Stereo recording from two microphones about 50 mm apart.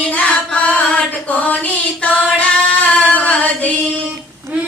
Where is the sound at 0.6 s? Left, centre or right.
Left.